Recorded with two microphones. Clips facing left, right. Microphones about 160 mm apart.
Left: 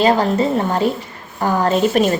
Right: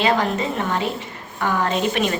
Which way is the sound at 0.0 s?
35° left (ahead or behind).